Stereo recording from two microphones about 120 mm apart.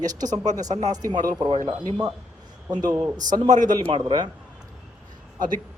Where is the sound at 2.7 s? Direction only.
35° right (ahead or behind).